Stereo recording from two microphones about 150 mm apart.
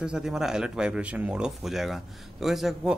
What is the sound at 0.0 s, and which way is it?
A man's voice, 5° right (ahead or behind).